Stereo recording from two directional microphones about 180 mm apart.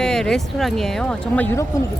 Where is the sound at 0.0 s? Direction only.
5° left (ahead or behind).